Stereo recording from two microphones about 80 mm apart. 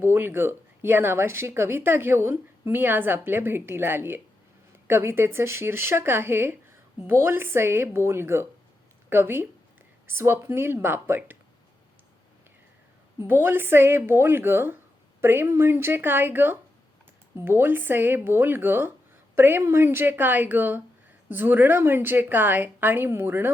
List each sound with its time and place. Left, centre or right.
0.0 s speech: right
13.1 s speech: right